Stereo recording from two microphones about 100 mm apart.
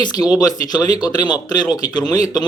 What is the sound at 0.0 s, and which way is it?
Speech, 45° left (ahead or behind).